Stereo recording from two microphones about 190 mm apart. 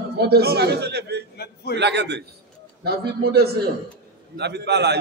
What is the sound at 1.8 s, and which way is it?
A man's voice, 65° right (ahead or behind).